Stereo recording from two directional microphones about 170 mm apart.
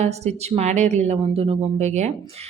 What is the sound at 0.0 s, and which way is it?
A woman's voice, 40° right (ahead or behind).